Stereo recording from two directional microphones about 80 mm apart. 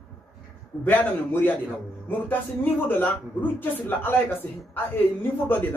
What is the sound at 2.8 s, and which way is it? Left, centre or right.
Speech, left.